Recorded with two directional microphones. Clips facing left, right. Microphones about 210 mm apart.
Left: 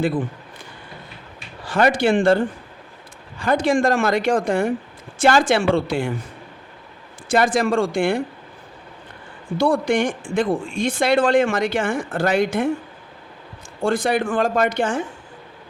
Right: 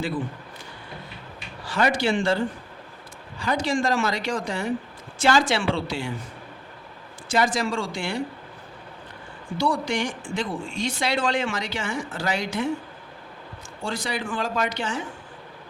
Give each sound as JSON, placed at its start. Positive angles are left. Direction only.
{"t": 1.6, "sound": "speech", "side_deg": 50}
{"t": 7.3, "sound": "speech", "side_deg": 55}
{"t": 9.6, "sound": "speech", "side_deg": 55}
{"t": 13.8, "sound": "speech", "side_deg": 55}